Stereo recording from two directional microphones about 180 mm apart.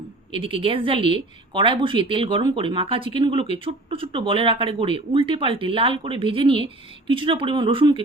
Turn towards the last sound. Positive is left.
turn(degrees=-25)  # may be behind; listen again after turning